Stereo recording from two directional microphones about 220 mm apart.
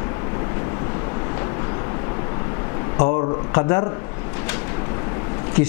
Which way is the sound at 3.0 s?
20° left (ahead or behind).